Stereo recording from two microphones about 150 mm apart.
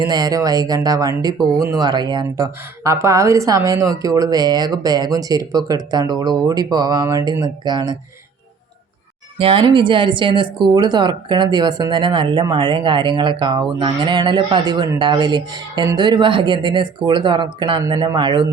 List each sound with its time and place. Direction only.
0.0 s speech: 25° right (ahead or behind)
9.4 s speech: 35° right (ahead or behind)